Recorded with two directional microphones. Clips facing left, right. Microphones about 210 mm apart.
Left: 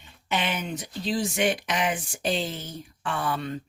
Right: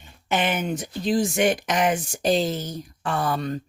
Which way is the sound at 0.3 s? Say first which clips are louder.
Right 5 dB; 50° right (ahead or behind).